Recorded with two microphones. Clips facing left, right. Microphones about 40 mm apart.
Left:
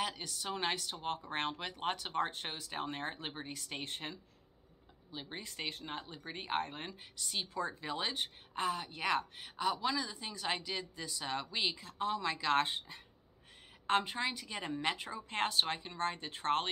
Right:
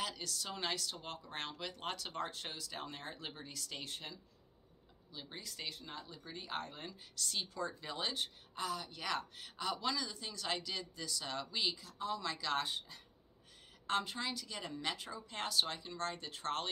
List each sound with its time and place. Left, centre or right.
0.0 s speech: left
7.2 s a woman's voice: centre
7.4 s a woman's voice: left
12.2 s a woman's voice: left